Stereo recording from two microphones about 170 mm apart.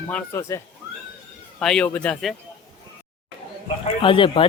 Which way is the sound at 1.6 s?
5° left (ahead or behind).